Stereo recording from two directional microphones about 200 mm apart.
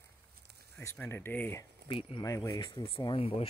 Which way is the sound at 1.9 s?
25° left (ahead or behind).